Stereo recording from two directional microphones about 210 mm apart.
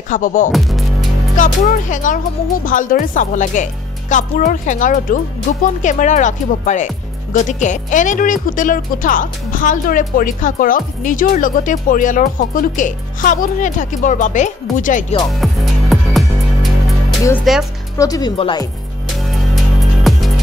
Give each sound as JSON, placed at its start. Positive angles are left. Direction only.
{"t": 0.1, "sound": "speech", "side_deg": 40}
{"t": 0.5, "sound": "music", "side_deg": 0}
{"t": 1.3, "sound": "speech", "side_deg": 40}
{"t": 15.4, "sound": "music", "side_deg": 0}
{"t": 17.5, "sound": "speech", "side_deg": 0}
{"t": 17.9, "sound": "speech", "side_deg": 15}
{"t": 19.1, "sound": "music", "side_deg": 0}